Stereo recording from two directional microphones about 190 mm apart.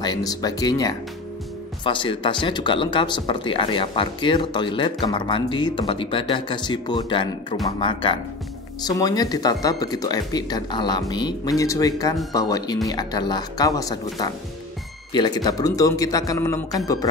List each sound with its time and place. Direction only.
0.0 s speech: 20° left (ahead or behind)